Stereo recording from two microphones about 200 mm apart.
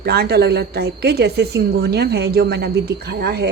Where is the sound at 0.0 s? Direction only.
55° right (ahead or behind).